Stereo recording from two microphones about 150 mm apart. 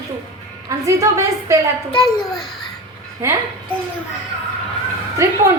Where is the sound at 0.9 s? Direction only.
20° right (ahead or behind).